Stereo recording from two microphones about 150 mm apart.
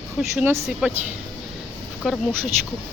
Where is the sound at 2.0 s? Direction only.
Centre (ahead or behind).